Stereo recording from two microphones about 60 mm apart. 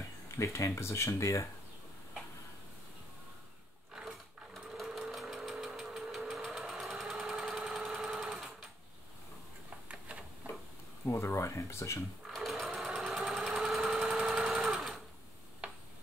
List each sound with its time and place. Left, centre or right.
0.4 s speech: left
4.6 s sewing machine: centre
6.5 s a sound: centre
11.1 s speech: left
12.4 s sewing machine: centre
15.6 s a sound: centre